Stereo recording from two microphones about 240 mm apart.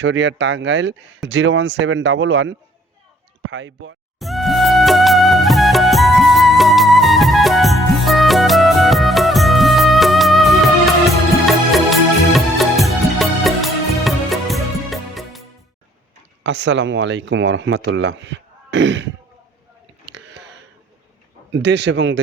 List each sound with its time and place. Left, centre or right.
0.0 s speech: right
4.2 s music: centre
16.4 s speech: right
20.1 s a sound: right
21.5 s speech: right